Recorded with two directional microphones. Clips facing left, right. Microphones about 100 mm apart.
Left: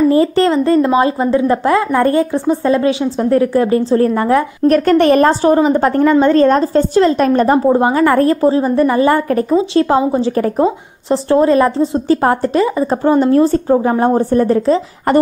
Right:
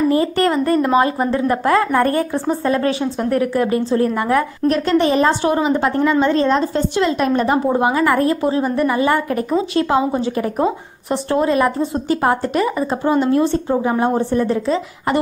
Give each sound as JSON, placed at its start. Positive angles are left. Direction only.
{"t": 0.1, "sound": "a woman's voice", "side_deg": 30}
{"t": 4.6, "sound": "a woman's voice", "side_deg": 50}
{"t": 5.3, "sound": "a woman's voice", "side_deg": 35}
{"t": 13.0, "sound": "a woman's voice", "side_deg": 40}